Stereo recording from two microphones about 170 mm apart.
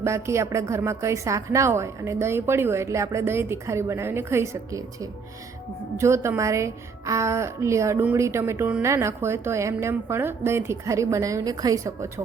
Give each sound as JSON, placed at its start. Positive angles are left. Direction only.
{"t": 0.0, "sound": "a woman's voice", "side_deg": -15}